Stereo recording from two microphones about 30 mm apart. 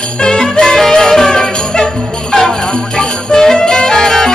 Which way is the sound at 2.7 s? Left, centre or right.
Left.